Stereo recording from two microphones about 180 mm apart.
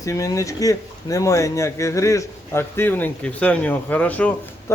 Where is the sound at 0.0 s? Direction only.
15° left (ahead or behind).